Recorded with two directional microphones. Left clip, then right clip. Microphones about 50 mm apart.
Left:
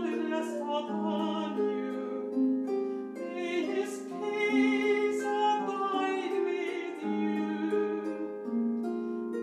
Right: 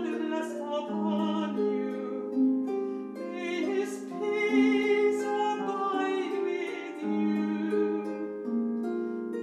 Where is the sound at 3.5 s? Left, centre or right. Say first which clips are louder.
Right 2 dB; centre.